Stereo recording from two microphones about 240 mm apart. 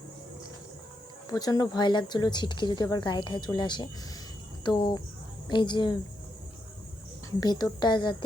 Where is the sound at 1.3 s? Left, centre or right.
Centre.